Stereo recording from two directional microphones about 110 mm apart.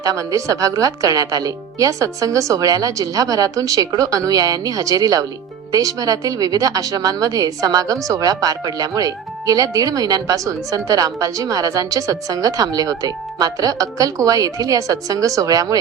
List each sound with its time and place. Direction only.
0.0 s a woman's voice: 30° right (ahead or behind)